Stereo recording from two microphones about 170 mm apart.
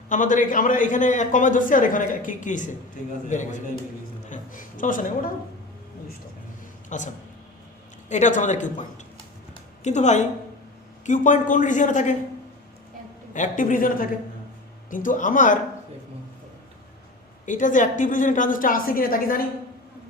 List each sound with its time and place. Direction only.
0.1 s a man's voice: 50° left (ahead or behind)
6.9 s a man's voice: 45° left (ahead or behind)
8.1 s a man's voice: 45° left (ahead or behind)
9.8 s a man's voice: 45° left (ahead or behind)
13.3 s a man's voice: 50° left (ahead or behind)
17.4 s a man's voice: 50° left (ahead or behind)